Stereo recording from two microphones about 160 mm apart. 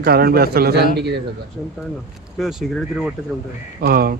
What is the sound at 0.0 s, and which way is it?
Speech, 75° right (ahead or behind).